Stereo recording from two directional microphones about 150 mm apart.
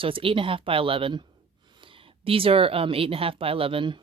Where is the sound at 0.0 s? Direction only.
35° right (ahead or behind).